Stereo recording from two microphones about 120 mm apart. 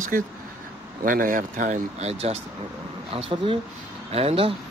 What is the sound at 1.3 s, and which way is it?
Speech, 90° right.